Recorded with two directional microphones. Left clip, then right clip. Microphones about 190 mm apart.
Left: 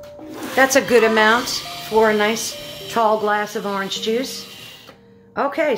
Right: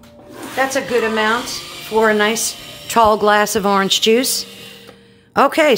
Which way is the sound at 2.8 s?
45° right (ahead or behind).